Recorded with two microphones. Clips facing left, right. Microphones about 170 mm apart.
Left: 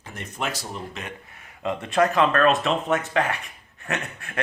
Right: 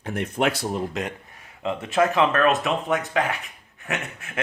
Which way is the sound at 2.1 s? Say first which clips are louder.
Left 1 dB; 15° right (ahead or behind).